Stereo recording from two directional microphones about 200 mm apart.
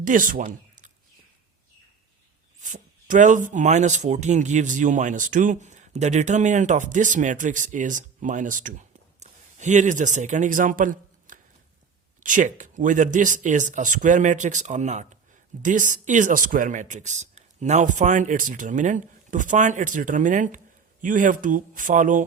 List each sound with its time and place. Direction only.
0.0 s speech: 40° right (ahead or behind)
2.6 s speech: 40° right (ahead or behind)